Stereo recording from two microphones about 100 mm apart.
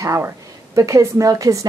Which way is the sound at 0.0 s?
30° right (ahead or behind).